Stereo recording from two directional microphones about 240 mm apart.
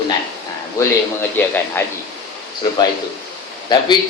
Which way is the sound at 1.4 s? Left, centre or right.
Centre.